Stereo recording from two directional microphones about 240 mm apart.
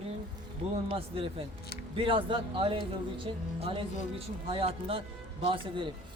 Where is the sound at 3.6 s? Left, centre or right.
Right.